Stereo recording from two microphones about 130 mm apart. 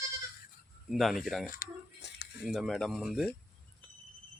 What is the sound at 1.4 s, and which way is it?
Speech, 90° left.